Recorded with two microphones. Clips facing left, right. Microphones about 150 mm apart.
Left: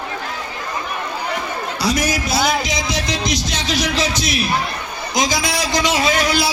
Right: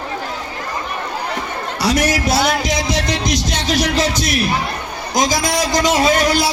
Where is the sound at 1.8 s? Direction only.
70° right (ahead or behind).